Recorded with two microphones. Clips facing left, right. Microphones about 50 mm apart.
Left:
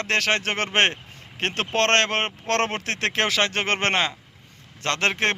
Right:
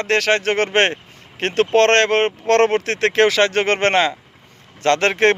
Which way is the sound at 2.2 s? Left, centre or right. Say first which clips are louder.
Right 9 dB; right.